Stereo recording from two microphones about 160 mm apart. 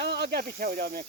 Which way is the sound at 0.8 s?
65° right (ahead or behind).